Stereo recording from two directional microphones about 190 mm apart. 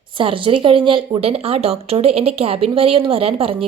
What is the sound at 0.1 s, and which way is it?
Speech, 25° right (ahead or behind).